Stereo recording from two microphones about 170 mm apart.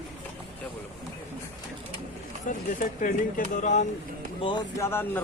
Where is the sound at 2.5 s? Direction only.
50° left (ahead or behind).